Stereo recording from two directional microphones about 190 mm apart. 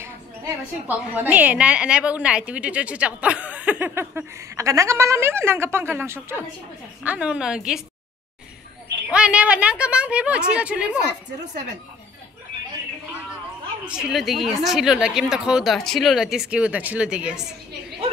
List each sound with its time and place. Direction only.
0.8 s a woman's voice: 10° right (ahead or behind)
9.1 s a woman's voice: 5° right (ahead or behind)
13.8 s a woman's voice: centre (ahead or behind)